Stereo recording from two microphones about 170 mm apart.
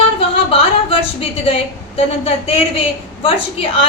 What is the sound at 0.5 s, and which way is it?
A woman's voice, 35° left (ahead or behind).